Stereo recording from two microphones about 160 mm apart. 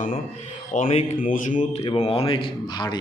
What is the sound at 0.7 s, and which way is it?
Speech, 55° left (ahead or behind).